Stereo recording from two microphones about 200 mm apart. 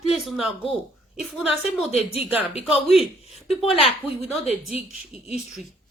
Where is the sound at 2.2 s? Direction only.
10° right (ahead or behind).